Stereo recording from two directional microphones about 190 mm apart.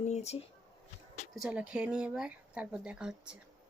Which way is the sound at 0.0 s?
35° left (ahead or behind).